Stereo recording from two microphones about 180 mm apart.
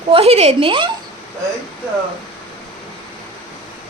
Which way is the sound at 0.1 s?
35° right (ahead or behind).